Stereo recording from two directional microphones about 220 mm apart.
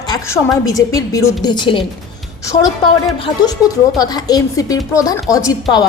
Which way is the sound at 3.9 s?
15° left (ahead or behind).